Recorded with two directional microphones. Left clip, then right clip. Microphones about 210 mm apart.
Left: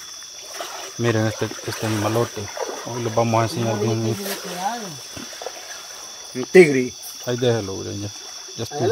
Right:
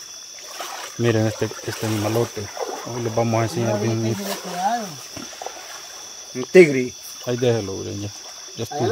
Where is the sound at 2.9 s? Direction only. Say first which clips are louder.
Left 2 dB; centre (ahead or behind).